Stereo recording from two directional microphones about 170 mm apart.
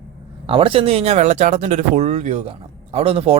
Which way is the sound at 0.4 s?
30° right (ahead or behind).